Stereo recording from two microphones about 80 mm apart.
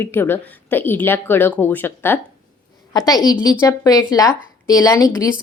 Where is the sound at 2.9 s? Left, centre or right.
Left.